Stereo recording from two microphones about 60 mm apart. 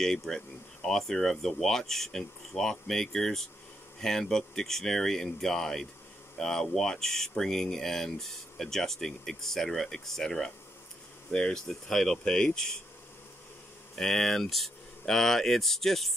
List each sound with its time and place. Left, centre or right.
0.0 s speech: centre
13.9 s speech: centre